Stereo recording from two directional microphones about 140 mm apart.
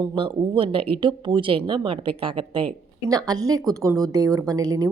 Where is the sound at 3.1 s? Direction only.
25° right (ahead or behind).